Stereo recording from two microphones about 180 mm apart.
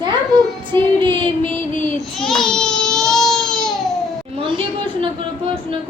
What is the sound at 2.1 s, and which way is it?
Baby cry, centre (ahead or behind).